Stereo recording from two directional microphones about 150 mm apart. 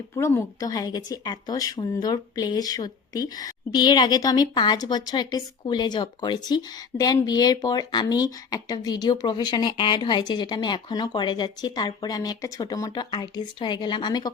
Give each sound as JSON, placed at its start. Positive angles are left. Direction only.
{"t": 0.2, "sound": "a woman's voice", "side_deg": 20}